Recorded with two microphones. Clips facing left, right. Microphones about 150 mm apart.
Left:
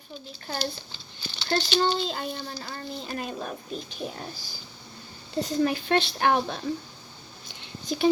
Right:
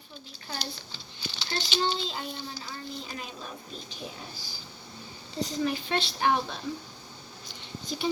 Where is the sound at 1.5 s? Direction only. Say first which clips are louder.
Left 6 dB; 50° left (ahead or behind).